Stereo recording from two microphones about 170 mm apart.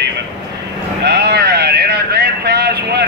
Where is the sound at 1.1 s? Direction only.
75° right (ahead or behind).